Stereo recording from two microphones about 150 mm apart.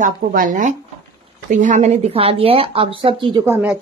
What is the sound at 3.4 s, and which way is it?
Speech, 10° right (ahead or behind).